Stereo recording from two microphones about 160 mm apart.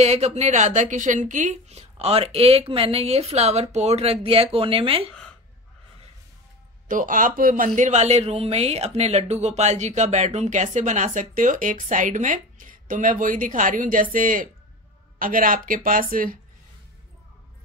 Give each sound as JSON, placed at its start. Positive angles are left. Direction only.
{"t": 0.0, "sound": "a woman's voice", "side_deg": -45}
{"t": 6.9, "sound": "speech", "side_deg": -55}